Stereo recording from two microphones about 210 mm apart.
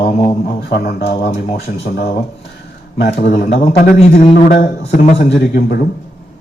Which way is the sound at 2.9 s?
50° left (ahead or behind).